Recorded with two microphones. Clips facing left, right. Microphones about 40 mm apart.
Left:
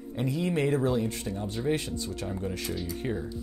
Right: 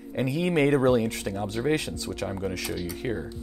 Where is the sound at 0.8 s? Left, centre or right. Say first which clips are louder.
Right 5 dB; right.